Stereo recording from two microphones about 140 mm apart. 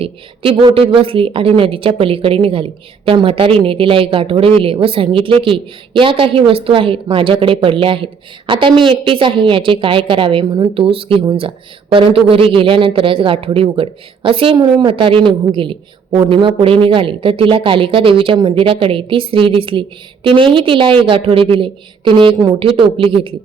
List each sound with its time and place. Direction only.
0.0 s a woman's voice: 40° right (ahead or behind)